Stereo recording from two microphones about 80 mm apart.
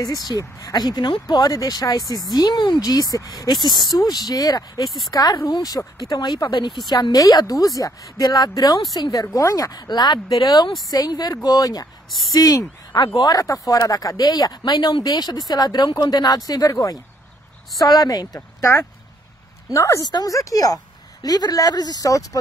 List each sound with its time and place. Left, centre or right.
0.0 s a woman's voice: left
0.7 s speech: left
2.3 s speech: left
2.8 s a woman's voice: left
3.6 s a woman's voice: left
4.8 s speech: centre
5.1 s a woman's voice: left
10.4 s a woman's voice: left
19.7 s a woman's voice: left